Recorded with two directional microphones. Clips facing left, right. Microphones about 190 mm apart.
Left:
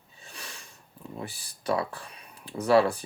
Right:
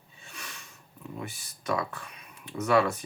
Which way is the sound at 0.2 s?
35° left (ahead or behind).